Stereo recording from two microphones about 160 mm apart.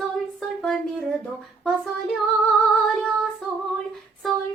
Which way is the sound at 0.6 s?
Centre (ahead or behind).